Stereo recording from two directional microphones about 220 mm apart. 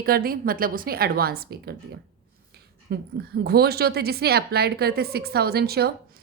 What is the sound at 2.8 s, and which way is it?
A woman's voice, 45° right (ahead or behind).